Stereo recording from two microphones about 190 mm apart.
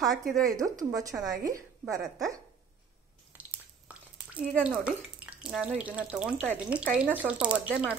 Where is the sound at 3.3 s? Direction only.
10° right (ahead or behind).